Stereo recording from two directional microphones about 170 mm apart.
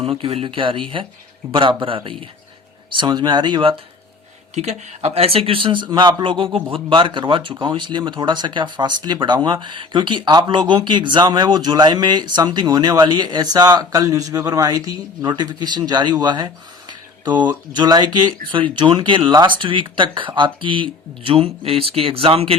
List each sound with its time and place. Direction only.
0.0 s speech: 35° right (ahead or behind)
4.5 s speech: 40° right (ahead or behind); by 16.5 s 25° right (ahead or behind)
17.3 s speech: 10° right (ahead or behind)
17.7 s speech: 25° right (ahead or behind)